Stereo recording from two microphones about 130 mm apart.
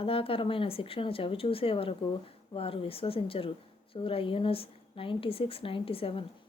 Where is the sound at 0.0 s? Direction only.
45° left (ahead or behind).